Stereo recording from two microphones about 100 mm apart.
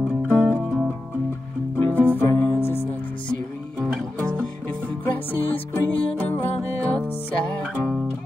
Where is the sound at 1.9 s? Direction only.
20° left (ahead or behind).